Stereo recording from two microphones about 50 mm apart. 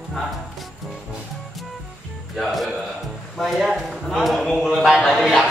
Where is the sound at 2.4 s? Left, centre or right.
Centre.